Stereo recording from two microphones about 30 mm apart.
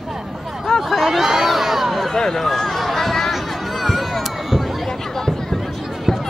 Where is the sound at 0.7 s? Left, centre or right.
Left.